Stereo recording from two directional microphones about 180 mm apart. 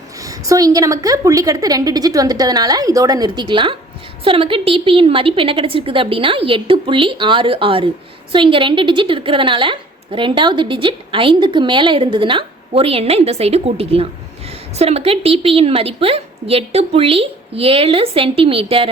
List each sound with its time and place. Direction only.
0.2 s a woman's voice: 20° right (ahead or behind)